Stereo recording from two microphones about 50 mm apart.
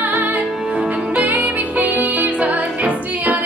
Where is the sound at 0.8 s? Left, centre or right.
Right.